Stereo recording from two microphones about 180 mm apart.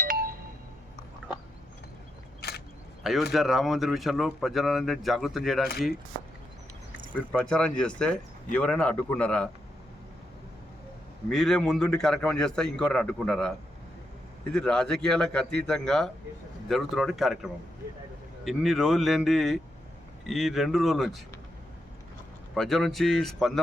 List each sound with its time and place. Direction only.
0.0 s a sound: 50° right (ahead or behind)
2.4 s a sound: 60° left (ahead or behind)
3.0 s speech: centre (ahead or behind)
7.1 s a man's voice: 5° left (ahead or behind)
11.3 s speech: 5° left (ahead or behind)
14.5 s speech: 5° left (ahead or behind)
22.5 s speech: centre (ahead or behind)